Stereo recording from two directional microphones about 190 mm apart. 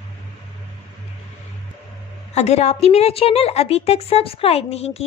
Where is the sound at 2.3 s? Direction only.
35° left (ahead or behind).